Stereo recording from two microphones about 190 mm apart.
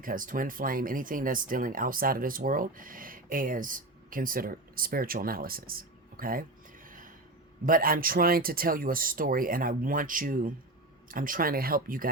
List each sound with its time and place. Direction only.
0.0 s speech: 45° right (ahead or behind)